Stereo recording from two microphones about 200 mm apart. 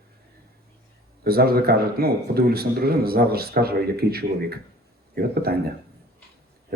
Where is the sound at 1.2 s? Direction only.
50° right (ahead or behind).